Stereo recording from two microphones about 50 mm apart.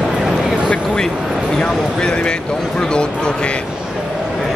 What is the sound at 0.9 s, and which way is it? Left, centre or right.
Speech, centre.